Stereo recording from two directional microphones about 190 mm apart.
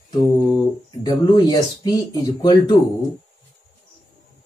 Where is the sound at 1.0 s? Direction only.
20° left (ahead or behind).